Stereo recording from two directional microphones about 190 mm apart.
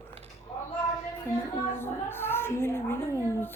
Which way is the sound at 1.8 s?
10° left (ahead or behind).